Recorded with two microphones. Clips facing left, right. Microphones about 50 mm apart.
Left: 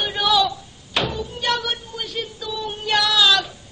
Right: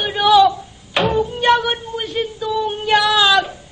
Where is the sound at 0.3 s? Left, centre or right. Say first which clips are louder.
Right 9 dB; right.